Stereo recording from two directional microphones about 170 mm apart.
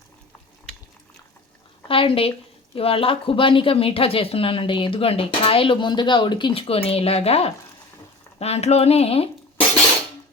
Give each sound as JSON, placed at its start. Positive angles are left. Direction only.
{"t": 1.9, "sound": "speech", "side_deg": 30}